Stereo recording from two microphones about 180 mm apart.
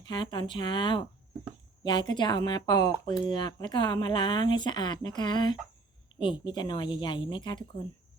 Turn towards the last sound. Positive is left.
turn(degrees=25)  # may be behind; listen again after turning